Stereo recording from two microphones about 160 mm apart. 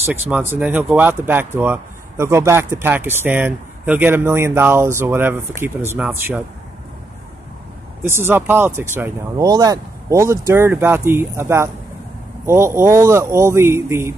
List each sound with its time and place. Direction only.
0.6 s speech: 10° right (ahead or behind)
8.1 s speech: 15° right (ahead or behind)